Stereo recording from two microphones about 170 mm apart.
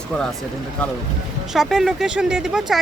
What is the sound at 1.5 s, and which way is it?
Speech, centre (ahead or behind).